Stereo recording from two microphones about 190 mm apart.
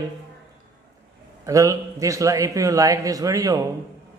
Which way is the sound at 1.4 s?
15° right (ahead or behind).